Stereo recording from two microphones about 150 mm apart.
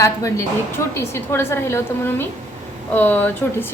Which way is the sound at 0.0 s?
20° left (ahead or behind).